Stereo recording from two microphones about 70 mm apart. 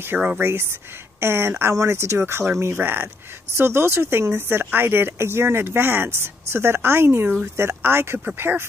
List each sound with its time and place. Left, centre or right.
0.4 s speech: right